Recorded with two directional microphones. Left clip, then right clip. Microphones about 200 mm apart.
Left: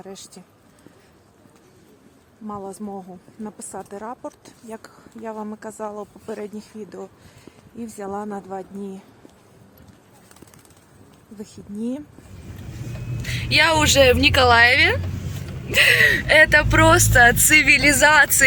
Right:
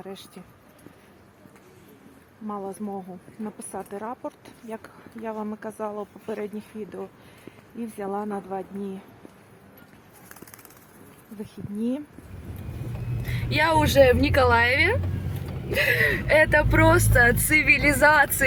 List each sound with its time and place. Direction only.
2.5 s a woman's voice: 5° left (ahead or behind)
4.3 s a woman's voice: 15° left (ahead or behind)
5.2 s speech: 5° left (ahead or behind)
6.0 s a woman's voice: 10° left (ahead or behind)
11.5 s a woman's voice: 15° left (ahead or behind)
13.2 s speech: 5° right (ahead or behind)